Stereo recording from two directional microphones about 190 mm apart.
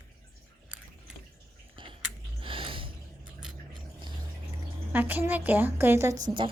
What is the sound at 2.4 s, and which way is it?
Gasp, 25° right (ahead or behind).